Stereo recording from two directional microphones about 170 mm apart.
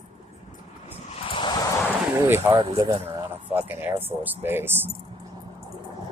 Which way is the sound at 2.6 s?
25° right (ahead or behind).